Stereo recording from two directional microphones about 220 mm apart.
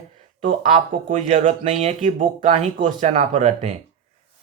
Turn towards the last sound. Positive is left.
turn(degrees=-30)  # may be behind; listen again after turning